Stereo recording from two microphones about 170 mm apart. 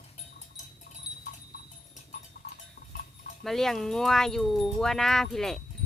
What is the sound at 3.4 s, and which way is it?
Speech, centre (ahead or behind).